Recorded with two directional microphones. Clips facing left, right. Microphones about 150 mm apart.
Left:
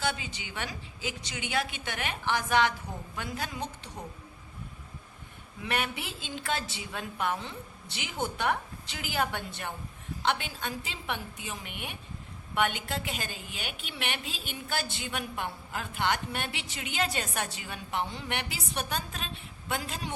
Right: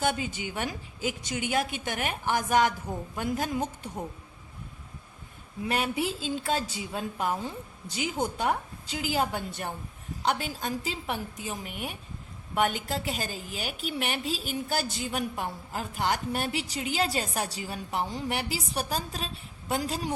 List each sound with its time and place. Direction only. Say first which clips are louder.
0.0 s a woman's voice: right 5 dB; 45° right (ahead or behind)
5.6 s a woman's voice: right 5 dB; 35° right (ahead or behind)